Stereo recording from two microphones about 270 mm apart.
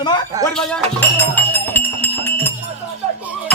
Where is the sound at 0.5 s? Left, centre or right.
Centre.